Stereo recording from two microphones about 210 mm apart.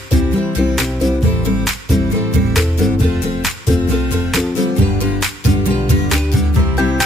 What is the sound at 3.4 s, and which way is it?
Music, centre (ahead or behind).